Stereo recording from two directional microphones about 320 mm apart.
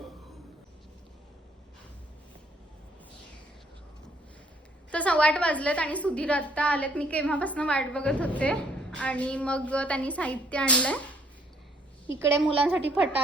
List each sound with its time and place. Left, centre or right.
4.9 s a woman's voice: centre
12.2 s a woman's voice: centre